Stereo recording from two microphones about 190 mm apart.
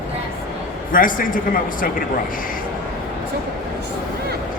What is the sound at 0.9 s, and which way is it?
Speech, 45° left (ahead or behind).